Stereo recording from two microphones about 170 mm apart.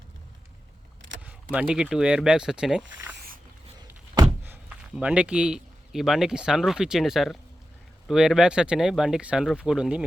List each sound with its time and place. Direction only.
1.2 s speech: 5° right (ahead or behind)
3.2 s a sound: 55° right (ahead or behind)
4.4 s a man's voice: 10° right (ahead or behind)